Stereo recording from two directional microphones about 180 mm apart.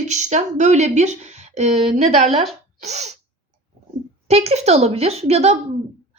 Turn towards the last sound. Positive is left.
turn(degrees=-35)  # may be behind; listen again after turning